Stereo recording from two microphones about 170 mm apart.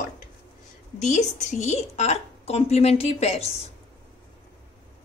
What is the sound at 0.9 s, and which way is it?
A woman's voice, 45° left (ahead or behind).